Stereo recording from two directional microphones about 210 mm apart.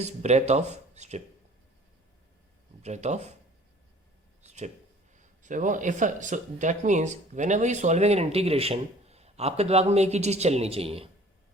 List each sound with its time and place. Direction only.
0.0 s speech: 30° right (ahead or behind)
2.8 s speech: 35° right (ahead or behind)
4.4 s a sound: 35° right (ahead or behind)
5.1 s speech: 35° right (ahead or behind)